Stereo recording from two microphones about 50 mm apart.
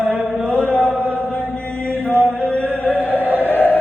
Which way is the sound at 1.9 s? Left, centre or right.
Right.